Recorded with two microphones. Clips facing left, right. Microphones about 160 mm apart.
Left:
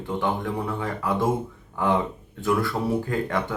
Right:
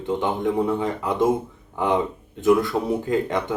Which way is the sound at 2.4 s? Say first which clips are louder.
Right 5 dB; 20° right (ahead or behind).